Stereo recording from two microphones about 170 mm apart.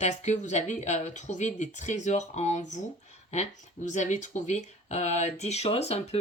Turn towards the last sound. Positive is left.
turn(degrees=40)  # may be behind; listen again after turning